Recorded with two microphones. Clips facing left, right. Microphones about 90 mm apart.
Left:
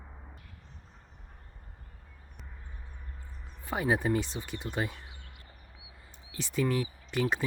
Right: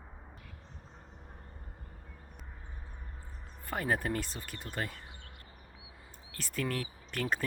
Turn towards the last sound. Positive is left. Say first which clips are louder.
# left 4 dB
turn(degrees=5)  # may be behind; listen again after turning